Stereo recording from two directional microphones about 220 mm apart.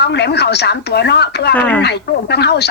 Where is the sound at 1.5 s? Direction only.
5° left (ahead or behind).